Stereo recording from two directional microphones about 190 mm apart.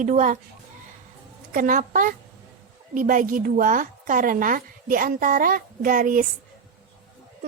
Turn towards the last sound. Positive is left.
turn(degrees=-45)  # may be behind; listen again after turning